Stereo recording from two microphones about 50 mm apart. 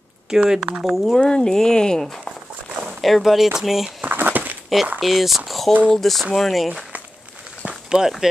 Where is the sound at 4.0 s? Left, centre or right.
Right.